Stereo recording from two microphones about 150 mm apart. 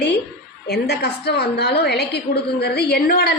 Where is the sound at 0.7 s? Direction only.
90° left.